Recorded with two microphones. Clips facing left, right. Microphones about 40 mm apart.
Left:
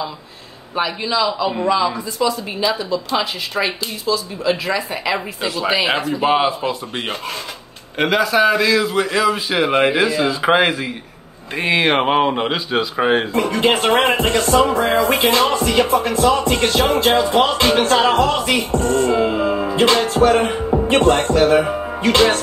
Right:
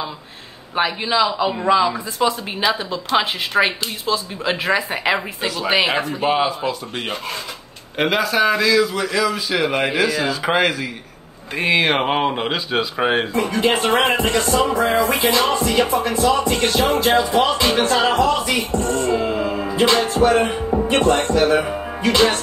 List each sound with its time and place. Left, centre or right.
1.0 s a man's voice: right
2.1 s a woman's voice: right
6.2 s speech: centre
8.0 s speech: centre
8.6 s a man's voice: left
11.5 s speech: centre
13.3 s music: left
17.1 s speech: left
19.1 s music: centre
19.7 s music: left